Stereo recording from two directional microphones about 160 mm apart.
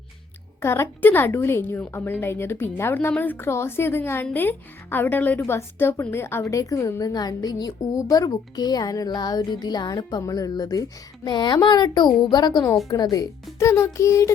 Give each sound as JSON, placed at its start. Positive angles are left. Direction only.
{"t": 0.6, "sound": "a woman's voice", "side_deg": 15}